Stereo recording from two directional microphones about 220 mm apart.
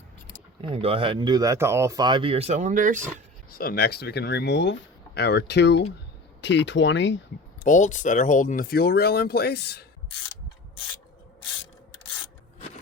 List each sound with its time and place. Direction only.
0.6 s speech: 25° right (ahead or behind)
3.5 s speech: 45° left (ahead or behind)
7.6 s speech: 35° left (ahead or behind)